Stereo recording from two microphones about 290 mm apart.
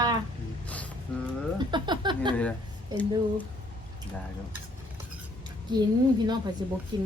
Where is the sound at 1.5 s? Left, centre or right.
Centre.